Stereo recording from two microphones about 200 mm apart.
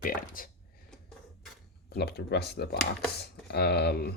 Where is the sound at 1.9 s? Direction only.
55° left (ahead or behind).